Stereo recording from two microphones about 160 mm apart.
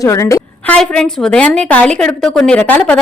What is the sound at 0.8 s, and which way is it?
A woman's voice, 5° left (ahead or behind).